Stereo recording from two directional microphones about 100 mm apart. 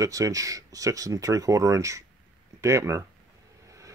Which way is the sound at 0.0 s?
35° right (ahead or behind).